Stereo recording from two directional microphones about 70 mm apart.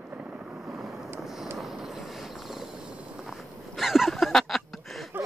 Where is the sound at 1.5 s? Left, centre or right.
Centre.